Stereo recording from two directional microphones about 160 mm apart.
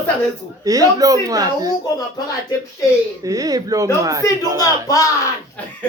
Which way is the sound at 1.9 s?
25° left (ahead or behind).